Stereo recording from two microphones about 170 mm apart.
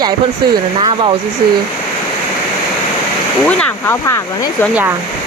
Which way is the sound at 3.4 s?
15° left (ahead or behind).